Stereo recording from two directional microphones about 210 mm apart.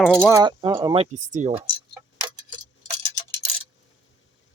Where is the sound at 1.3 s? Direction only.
35° right (ahead or behind).